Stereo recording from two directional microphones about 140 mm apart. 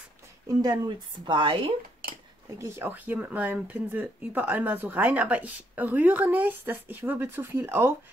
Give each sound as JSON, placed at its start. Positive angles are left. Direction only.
{"t": 0.6, "sound": "a woman's voice", "side_deg": -30}
{"t": 2.6, "sound": "speech", "side_deg": -15}